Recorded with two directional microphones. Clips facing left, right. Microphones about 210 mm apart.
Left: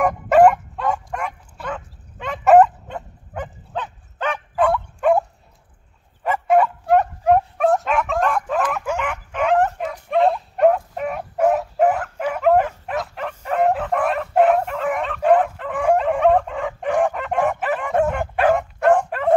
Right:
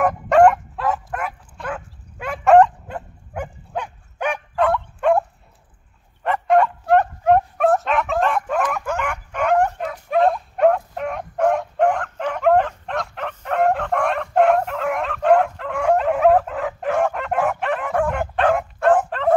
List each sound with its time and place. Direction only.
0.0 s dog: centre (ahead or behind)
2.4 s dog: 5° left (ahead or behind)
2.9 s dog: 10° right (ahead or behind)
4.6 s fowl: centre (ahead or behind)
6.2 s bow-wow: 5° left (ahead or behind)
17.0 s chicken: centre (ahead or behind)
17.5 s bow-wow: centre (ahead or behind)
18.0 s dog: centre (ahead or behind)